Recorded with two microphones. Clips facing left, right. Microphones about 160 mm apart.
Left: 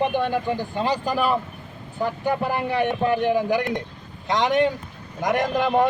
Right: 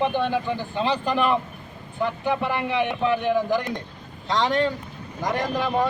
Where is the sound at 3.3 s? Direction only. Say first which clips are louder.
Left 1 dB; 10° left (ahead or behind).